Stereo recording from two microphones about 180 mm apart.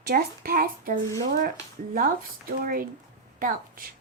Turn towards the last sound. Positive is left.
turn(degrees=-50)  # may be behind; listen again after turning